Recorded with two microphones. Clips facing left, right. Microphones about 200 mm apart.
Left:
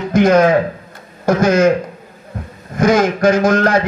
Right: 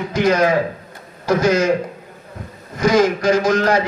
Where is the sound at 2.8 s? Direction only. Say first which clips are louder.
Left 2 dB; 55° left (ahead or behind).